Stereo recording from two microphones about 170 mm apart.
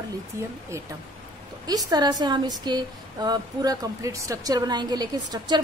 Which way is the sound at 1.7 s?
25° right (ahead or behind).